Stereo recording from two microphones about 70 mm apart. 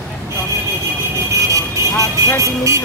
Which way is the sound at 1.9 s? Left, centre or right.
Left.